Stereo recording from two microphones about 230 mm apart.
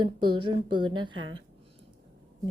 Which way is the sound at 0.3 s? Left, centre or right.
Right.